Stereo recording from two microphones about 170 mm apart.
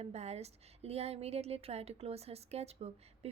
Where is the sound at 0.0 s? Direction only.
40° right (ahead or behind).